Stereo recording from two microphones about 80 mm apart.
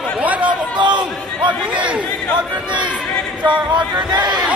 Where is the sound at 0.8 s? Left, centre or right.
Right.